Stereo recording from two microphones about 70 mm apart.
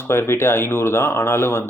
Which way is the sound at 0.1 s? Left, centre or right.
Left.